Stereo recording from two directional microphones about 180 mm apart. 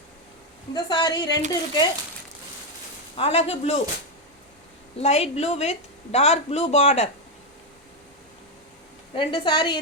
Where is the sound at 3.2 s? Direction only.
35° left (ahead or behind).